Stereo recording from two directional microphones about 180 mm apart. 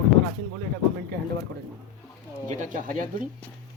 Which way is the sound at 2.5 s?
45° right (ahead or behind).